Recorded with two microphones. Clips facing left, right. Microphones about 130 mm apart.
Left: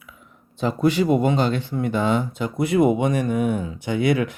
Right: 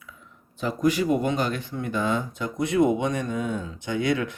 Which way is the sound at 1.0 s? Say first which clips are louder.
Left 6 dB; 50° left (ahead or behind).